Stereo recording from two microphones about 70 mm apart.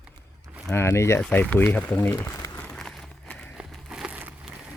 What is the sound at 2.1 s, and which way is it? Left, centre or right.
Speech, left.